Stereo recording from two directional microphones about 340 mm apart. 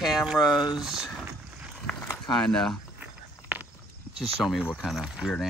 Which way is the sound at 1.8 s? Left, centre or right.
Centre.